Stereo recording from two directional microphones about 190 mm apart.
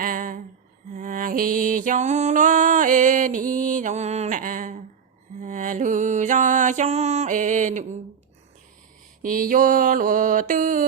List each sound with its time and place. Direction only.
0.0 s a sound: 45° right (ahead or behind)
0.9 s music: 45° right (ahead or behind)
9.2 s mantra: 45° right (ahead or behind)